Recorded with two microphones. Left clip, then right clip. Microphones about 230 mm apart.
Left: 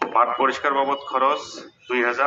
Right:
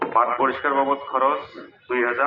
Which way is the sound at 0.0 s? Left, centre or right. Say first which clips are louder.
Even; left.